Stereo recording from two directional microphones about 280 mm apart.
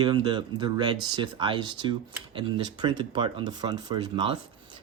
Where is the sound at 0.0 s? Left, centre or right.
Centre.